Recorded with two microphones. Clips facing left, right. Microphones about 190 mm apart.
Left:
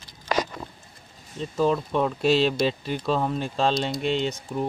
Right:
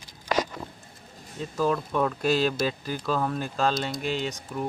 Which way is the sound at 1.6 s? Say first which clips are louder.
Left 2 dB; 20° left (ahead or behind).